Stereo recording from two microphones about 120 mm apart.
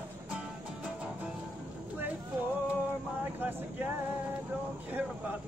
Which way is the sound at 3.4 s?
15° right (ahead or behind).